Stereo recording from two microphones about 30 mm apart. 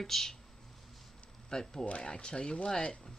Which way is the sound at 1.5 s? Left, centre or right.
Centre.